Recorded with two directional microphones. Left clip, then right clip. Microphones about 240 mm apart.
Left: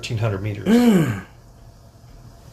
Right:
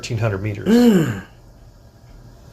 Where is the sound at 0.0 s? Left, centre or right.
Centre.